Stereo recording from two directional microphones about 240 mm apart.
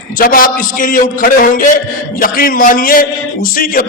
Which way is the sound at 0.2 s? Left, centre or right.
Left.